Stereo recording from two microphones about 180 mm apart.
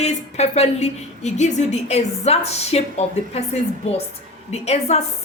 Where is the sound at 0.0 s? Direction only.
40° left (ahead or behind).